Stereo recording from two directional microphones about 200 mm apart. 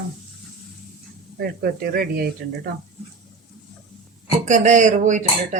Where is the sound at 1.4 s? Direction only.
50° right (ahead or behind).